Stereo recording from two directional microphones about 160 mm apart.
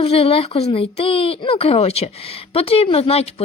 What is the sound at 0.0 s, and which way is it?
Speech, 35° left (ahead or behind).